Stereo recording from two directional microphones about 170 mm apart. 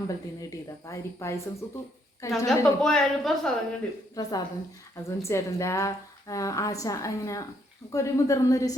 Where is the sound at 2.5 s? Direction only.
5° left (ahead or behind).